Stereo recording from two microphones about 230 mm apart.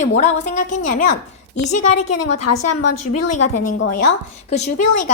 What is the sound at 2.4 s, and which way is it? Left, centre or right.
A woman's voice, left.